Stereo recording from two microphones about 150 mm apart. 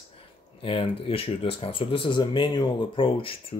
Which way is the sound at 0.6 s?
35° left (ahead or behind).